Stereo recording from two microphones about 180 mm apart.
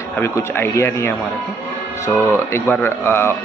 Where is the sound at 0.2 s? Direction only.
15° left (ahead or behind).